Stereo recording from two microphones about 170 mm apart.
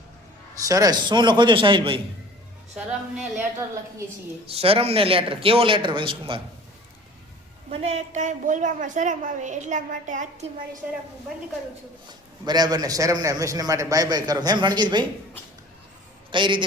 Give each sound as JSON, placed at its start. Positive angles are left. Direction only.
{"t": 0.7, "sound": "a man's voice", "side_deg": -20}
{"t": 2.7, "sound": "speech", "side_deg": -5}
{"t": 4.4, "sound": "speech", "side_deg": -35}
{"t": 7.7, "sound": "a woman's voice", "side_deg": -35}
{"t": 12.5, "sound": "a man's voice", "side_deg": -25}
{"t": 16.3, "sound": "a man's voice", "side_deg": -30}